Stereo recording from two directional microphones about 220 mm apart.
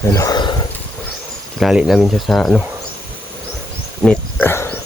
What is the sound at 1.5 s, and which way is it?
Speech, centre (ahead or behind).